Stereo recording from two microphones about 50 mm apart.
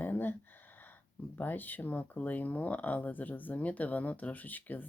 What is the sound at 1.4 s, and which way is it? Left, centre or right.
Speech, left.